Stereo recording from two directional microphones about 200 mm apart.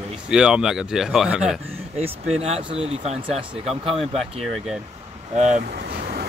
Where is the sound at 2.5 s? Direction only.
30° right (ahead or behind).